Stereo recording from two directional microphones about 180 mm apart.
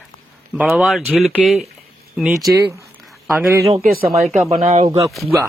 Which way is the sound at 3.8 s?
55° right (ahead or behind).